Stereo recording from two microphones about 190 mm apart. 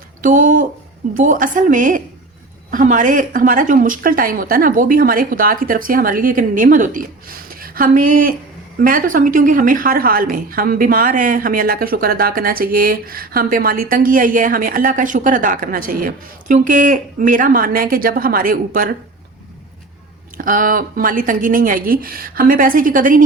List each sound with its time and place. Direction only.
0.2 s a woman's voice: 45° right (ahead or behind)
20.3 s a woman's voice: 45° right (ahead or behind)